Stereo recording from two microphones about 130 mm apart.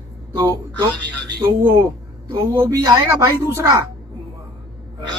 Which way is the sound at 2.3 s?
25° right (ahead or behind).